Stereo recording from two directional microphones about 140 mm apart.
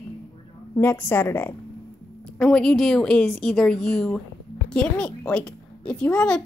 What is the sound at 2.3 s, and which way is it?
A woman's voice, 5° left (ahead or behind).